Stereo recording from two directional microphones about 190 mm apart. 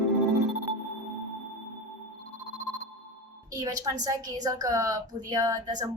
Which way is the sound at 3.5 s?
20° right (ahead or behind).